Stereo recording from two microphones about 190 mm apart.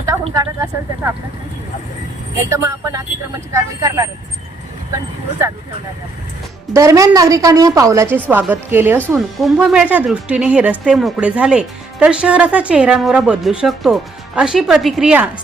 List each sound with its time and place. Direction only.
0.0 s a sound: 15° right (ahead or behind)
2.5 s a woman's voice: 15° right (ahead or behind)
6.7 s a woman's voice: 15° right (ahead or behind)